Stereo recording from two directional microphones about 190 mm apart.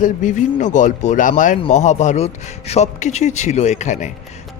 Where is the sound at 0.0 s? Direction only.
40° left (ahead or behind).